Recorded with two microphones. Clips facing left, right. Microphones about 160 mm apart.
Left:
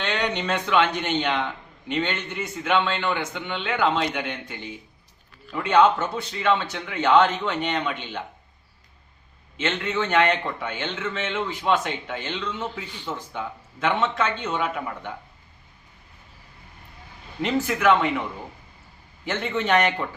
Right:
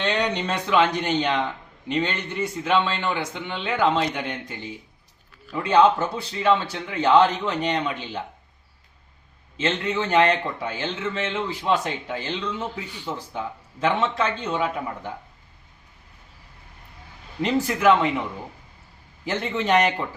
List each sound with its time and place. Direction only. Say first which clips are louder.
0.0 s speech: right 2 dB; 35° right (ahead or behind)
5.6 s speech: right 1 dB; 35° right (ahead or behind)
9.6 s speech: right 1 dB; 35° right (ahead or behind)
12.8 s speech: right 1 dB; 10° right (ahead or behind)
13.1 s speech: right 1 dB; 35° right (ahead or behind)
17.4 s speech: right 2 dB; 35° right (ahead or behind)
19.2 s speech: even; 35° right (ahead or behind)